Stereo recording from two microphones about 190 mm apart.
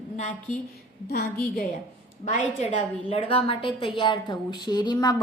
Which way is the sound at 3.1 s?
30° left (ahead or behind).